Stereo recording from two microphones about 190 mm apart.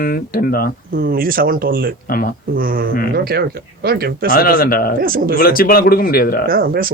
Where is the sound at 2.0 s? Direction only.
50° left (ahead or behind).